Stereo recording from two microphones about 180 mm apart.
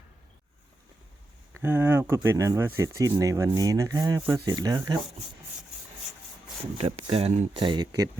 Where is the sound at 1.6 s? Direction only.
10° right (ahead or behind).